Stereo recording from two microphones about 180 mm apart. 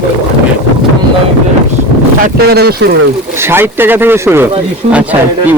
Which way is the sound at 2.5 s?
60° right (ahead or behind).